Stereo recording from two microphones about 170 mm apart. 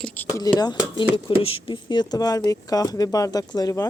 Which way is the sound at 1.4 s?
30° left (ahead or behind).